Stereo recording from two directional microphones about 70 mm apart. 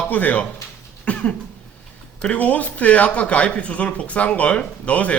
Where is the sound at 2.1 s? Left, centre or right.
Centre.